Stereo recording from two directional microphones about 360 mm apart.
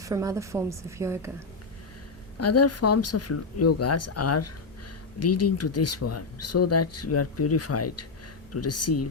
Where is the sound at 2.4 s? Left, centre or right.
Left.